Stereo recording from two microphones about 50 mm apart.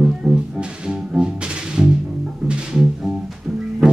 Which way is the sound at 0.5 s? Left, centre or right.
Centre.